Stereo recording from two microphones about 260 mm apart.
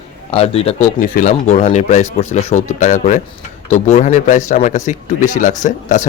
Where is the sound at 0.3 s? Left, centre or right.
Left.